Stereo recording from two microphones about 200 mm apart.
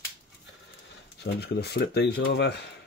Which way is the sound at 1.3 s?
55° left (ahead or behind).